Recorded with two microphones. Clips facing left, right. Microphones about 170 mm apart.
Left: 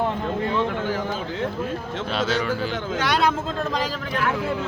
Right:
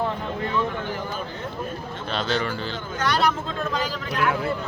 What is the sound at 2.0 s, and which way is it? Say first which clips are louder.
Speech: left 2 dB; 5° left (ahead or behind).